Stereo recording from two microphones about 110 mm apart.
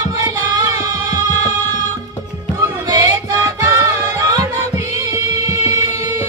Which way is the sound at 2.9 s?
35° right (ahead or behind).